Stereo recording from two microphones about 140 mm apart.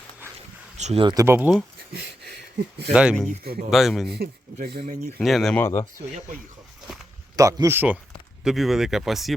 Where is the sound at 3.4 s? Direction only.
90° right.